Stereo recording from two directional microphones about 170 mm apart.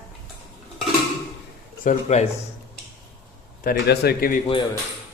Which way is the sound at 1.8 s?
45° left (ahead or behind).